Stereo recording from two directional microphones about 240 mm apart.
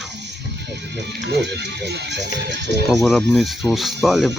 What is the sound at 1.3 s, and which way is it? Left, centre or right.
Speech, right.